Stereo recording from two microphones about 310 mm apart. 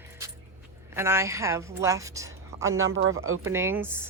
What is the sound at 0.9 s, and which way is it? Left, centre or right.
A woman's voice, centre.